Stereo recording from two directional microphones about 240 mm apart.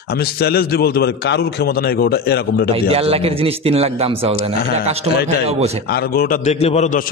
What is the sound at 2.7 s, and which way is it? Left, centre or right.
A man's voice, right.